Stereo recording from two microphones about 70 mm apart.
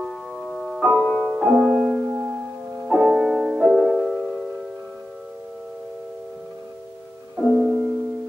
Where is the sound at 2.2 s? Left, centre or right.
Right.